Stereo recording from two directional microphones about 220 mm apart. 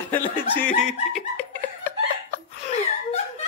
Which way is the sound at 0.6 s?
35° left (ahead or behind).